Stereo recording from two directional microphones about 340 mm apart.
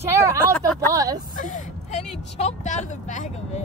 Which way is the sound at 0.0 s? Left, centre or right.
Centre.